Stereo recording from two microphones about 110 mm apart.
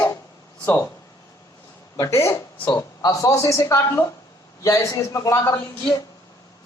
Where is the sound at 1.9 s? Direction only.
30° left (ahead or behind).